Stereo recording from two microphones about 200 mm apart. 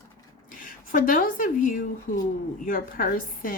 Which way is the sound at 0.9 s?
45° left (ahead or behind).